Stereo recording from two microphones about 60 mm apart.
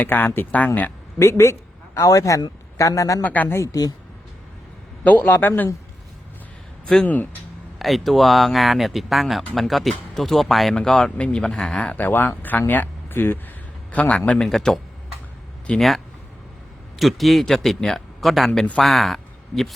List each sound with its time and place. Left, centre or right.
0.0 s a man's voice: left
1.2 s speech: left
2.0 s a man's voice: left
3.2 s speech: left
3.5 s a woman's voice: left
5.0 s a man's voice: left
6.8 s speech: centre
7.8 s speech: centre
10.8 s speech: centre; by 13.4 s left
13.9 s a man's voice: left
14.4 s speech: centre
15.7 s speech: centre
17.0 s a man's voice: centre